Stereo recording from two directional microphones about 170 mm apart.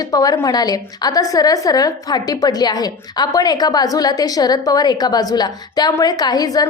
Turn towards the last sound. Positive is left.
turn(degrees=20)  # may be behind; listen again after turning